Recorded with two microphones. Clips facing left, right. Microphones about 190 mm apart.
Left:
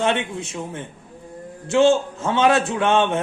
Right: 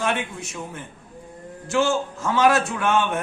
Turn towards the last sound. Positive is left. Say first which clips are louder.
# left 3 dB
turn(degrees=25)  # may be behind; listen again after turning